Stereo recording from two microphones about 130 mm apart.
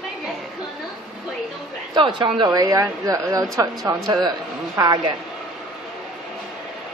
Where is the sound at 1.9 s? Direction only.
40° right (ahead or behind).